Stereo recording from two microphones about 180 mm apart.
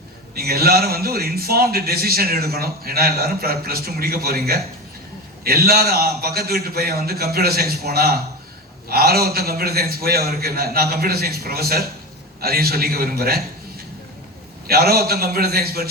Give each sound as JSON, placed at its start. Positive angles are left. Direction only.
{"t": 0.3, "sound": "a man's voice", "side_deg": -60}
{"t": 14.7, "sound": "a man's voice", "side_deg": -60}